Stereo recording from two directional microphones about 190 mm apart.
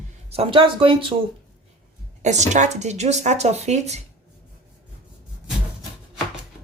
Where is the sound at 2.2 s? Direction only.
40° right (ahead or behind).